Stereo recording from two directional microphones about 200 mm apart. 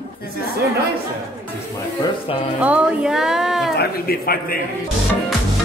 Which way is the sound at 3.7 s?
50° left (ahead or behind).